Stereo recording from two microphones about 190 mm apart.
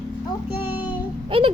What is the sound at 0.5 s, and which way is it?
Child singing, 10° right (ahead or behind).